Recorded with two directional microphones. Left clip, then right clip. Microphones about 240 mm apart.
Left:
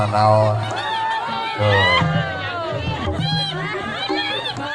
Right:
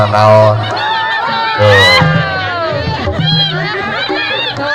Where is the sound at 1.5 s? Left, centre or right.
Right.